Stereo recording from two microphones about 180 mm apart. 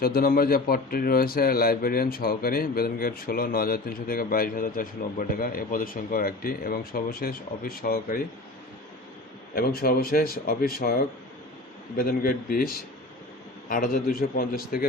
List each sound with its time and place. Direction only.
0.0 s speech: 55° left (ahead or behind)
9.6 s speech: 55° left (ahead or behind)
11.9 s a man's voice: 55° left (ahead or behind)